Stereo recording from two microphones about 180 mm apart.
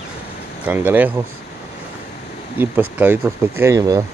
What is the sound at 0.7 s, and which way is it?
Speech, 10° right (ahead or behind).